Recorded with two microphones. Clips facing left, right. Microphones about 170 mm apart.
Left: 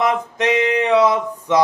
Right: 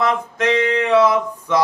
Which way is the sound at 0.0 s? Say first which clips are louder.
Left 1 dB; 20° left (ahead or behind).